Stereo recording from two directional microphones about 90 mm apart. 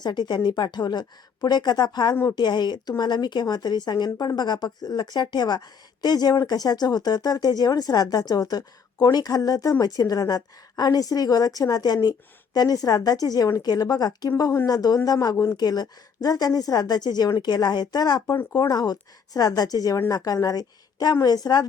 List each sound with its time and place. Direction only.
0.0 s a woman's voice: 55° left (ahead or behind)